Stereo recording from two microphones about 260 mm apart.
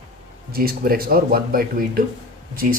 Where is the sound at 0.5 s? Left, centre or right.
Right.